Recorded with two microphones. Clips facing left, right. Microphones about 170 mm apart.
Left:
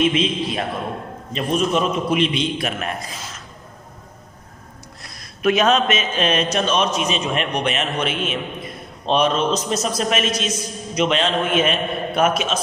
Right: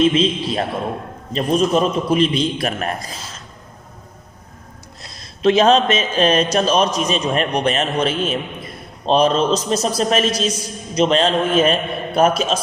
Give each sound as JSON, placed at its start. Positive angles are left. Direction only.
{"t": 0.0, "sound": "a man's voice", "side_deg": -35}
{"t": 5.0, "sound": "a man's voice", "side_deg": -25}